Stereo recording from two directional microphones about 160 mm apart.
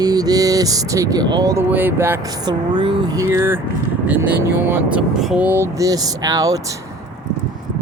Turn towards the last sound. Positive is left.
turn(degrees=-20)  # may be behind; listen again after turning